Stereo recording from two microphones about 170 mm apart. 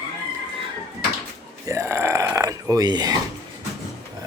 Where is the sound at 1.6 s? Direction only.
15° right (ahead or behind).